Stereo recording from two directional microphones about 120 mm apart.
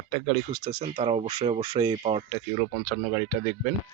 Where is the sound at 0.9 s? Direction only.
55° right (ahead or behind).